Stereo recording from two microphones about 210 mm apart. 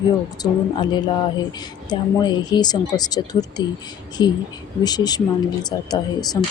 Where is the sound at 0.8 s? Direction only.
20° left (ahead or behind).